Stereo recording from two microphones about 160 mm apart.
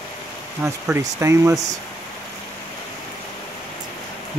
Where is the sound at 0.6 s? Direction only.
15° right (ahead or behind).